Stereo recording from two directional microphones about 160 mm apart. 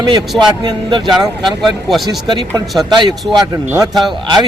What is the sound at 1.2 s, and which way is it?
Speech, centre (ahead or behind).